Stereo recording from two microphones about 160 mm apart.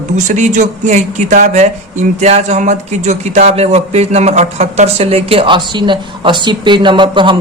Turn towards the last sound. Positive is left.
turn(degrees=-30)  # may be behind; listen again after turning